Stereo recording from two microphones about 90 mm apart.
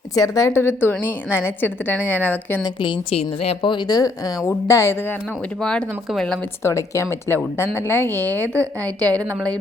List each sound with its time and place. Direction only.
0.1 s a woman's voice: 40° left (ahead or behind); by 2.6 s 15° left (ahead or behind)
2.8 s a woman's voice: 75° left (ahead or behind)
3.8 s speech: 45° left (ahead or behind)
4.4 s speech: 30° left (ahead or behind)
5.6 s speech: 10° left (ahead or behind)
6.6 s a woman's voice: 35° left (ahead or behind); by 9.6 s 15° left (ahead or behind)